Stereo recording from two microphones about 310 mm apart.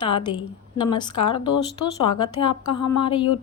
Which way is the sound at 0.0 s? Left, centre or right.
Centre.